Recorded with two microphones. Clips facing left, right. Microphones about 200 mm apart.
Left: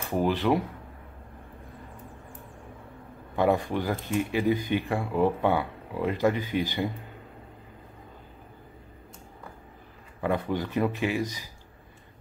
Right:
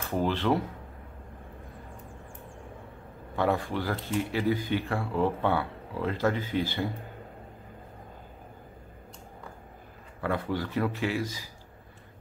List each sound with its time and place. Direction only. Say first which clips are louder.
0.1 s speech: left 2 dB; 15° left (ahead or behind)
3.3 s speech: left 3 dB; 15° left (ahead or behind)
10.2 s speech: left 2 dB; 20° left (ahead or behind)